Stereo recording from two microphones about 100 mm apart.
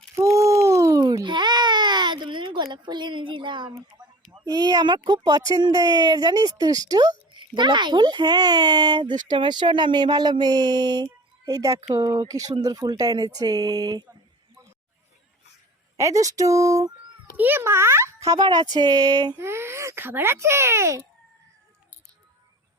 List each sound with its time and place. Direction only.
0.2 s a sound: 30° right (ahead or behind)
1.2 s baby cry: 50° right (ahead or behind)
4.4 s speech: 40° right (ahead or behind)
16.0 s speech: 35° right (ahead or behind)
17.3 s a child's voice: 20° right (ahead or behind)
18.3 s speech: 45° right (ahead or behind)
19.4 s speech: 25° right (ahead or behind)